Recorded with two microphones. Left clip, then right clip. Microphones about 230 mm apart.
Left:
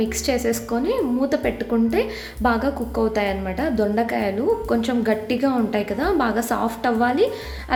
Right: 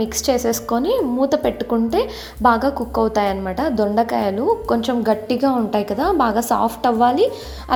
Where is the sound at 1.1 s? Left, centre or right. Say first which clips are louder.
Right 4 dB; centre.